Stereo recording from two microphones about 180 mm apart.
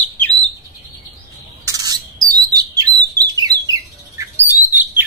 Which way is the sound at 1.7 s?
20° right (ahead or behind).